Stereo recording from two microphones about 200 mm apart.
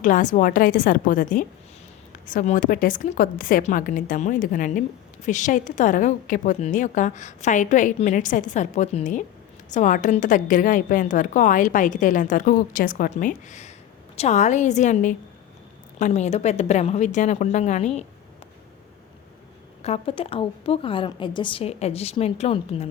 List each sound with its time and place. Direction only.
0.0 s a woman's voice: 40° left (ahead or behind)
19.8 s a woman's voice: 30° left (ahead or behind)